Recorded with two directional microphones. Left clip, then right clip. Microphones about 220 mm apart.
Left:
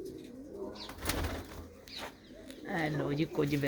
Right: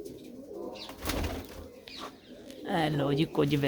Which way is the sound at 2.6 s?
10° right (ahead or behind).